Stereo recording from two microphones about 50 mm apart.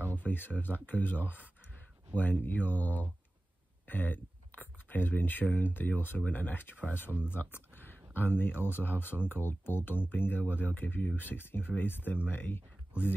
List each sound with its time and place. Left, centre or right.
0.0 s speech: left
7.2 s a sound: left
8.1 s speech: left